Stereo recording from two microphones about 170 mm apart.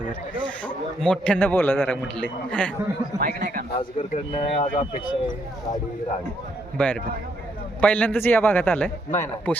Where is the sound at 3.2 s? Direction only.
60° right (ahead or behind).